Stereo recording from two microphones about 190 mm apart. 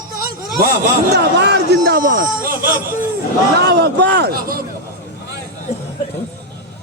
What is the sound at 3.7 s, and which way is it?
Speech, 65° right (ahead or behind).